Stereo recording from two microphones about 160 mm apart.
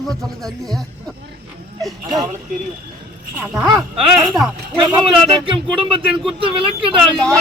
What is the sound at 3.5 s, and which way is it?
Speech, centre (ahead or behind).